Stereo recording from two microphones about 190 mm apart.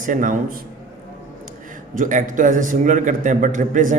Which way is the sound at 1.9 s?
45° right (ahead or behind).